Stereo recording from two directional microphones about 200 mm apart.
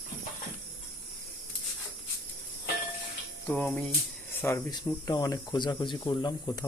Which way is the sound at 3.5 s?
5° left (ahead or behind).